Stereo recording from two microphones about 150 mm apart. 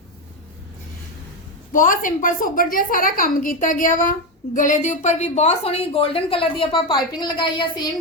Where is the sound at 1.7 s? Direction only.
65° left (ahead or behind).